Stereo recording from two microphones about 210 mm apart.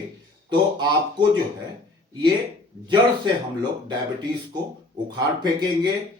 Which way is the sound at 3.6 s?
20° right (ahead or behind).